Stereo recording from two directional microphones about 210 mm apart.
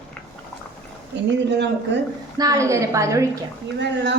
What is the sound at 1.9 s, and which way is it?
Speech, 55° right (ahead or behind).